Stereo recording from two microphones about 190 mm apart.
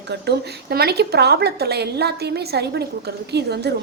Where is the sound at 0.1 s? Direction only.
55° right (ahead or behind).